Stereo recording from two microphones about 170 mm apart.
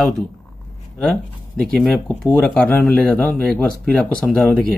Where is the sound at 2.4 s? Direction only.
10° left (ahead or behind).